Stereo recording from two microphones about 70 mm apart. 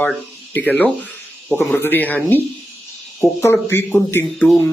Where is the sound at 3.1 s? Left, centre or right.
Left.